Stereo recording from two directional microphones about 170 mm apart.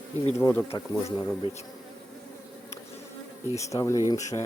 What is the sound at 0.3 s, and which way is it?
Speech, 15° left (ahead or behind).